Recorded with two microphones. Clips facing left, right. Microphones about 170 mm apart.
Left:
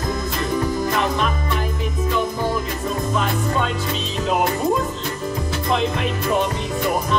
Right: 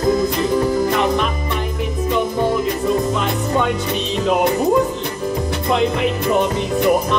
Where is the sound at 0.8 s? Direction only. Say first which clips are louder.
Right 3 dB; 15° right (ahead or behind).